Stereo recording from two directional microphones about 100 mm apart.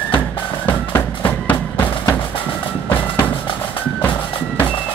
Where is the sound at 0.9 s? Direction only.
15° left (ahead or behind).